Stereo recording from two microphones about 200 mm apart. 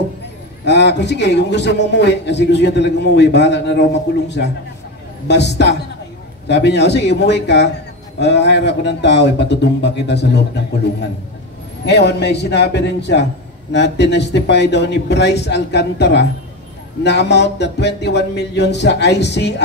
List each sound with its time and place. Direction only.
0.7 s a man's voice: 60° left (ahead or behind)
5.3 s a man's voice: 60° left (ahead or behind)